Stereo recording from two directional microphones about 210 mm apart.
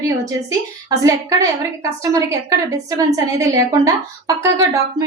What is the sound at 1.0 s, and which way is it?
A woman's voice, 15° right (ahead or behind).